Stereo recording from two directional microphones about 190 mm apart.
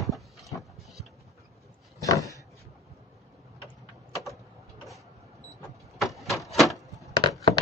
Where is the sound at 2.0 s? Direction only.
15° left (ahead or behind).